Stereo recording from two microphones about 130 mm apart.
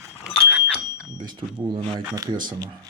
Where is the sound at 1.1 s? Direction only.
35° right (ahead or behind).